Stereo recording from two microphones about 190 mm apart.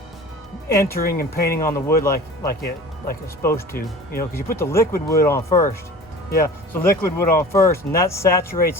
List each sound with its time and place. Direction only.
0.7 s speech: 15° left (ahead or behind)
0.9 s speech: 50° left (ahead or behind)
1.6 s speech: 15° left (ahead or behind)
2.5 s speech: 50° left (ahead or behind)
3.4 s speech: 15° left (ahead or behind)
3.8 s speech: 50° left (ahead or behind)
4.5 s speech: 15° left (ahead or behind)